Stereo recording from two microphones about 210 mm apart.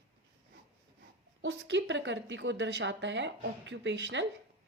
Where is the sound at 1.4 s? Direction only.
60° right (ahead or behind).